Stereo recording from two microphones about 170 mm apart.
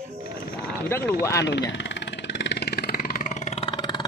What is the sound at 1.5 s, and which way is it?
Vehicle, 90° left.